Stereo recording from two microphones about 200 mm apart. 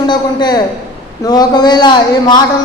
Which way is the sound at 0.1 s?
20° left (ahead or behind).